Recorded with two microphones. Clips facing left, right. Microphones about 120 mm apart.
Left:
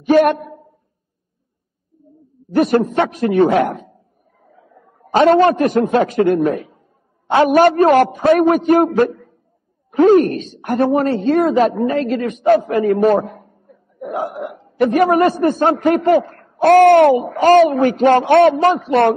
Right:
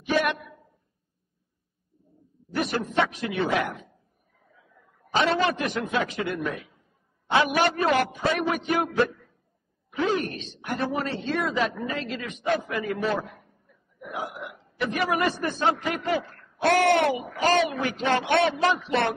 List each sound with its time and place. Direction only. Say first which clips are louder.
0.0 s a man's voice: left 13 dB; 45° left (ahead or behind)
2.5 s a man's voice: left 11 dB; 45° left (ahead or behind)